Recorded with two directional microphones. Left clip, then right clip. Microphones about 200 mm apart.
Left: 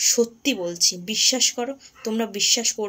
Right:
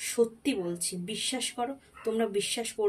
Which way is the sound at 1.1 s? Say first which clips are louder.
Left 9 dB; 30° left (ahead or behind).